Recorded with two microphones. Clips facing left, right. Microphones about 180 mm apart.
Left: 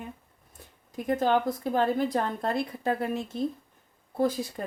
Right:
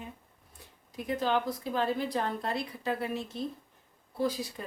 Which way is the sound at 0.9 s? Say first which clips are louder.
Left 5 dB; 50° left (ahead or behind).